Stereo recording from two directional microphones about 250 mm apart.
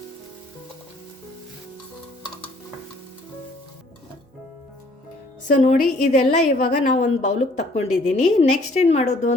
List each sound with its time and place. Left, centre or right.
5.5 s a woman's voice: left